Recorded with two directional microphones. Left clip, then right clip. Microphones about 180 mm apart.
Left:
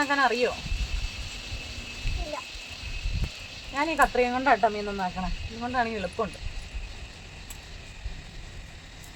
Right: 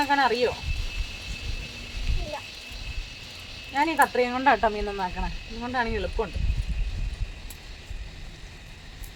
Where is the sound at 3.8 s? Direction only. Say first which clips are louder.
Right 1 dB; 30° right (ahead or behind).